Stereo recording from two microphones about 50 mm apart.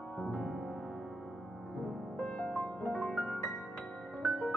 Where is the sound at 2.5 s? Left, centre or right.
Left.